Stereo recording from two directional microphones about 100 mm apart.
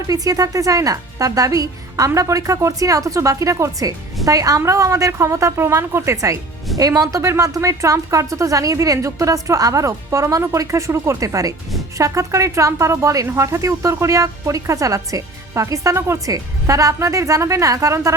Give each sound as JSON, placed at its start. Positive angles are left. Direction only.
{"t": 0.1, "sound": "speech", "side_deg": -35}